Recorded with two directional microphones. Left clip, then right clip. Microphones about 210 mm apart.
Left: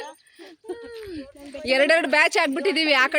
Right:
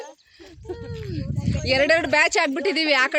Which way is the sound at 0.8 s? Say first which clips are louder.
Right 1 dB; 10° left (ahead or behind).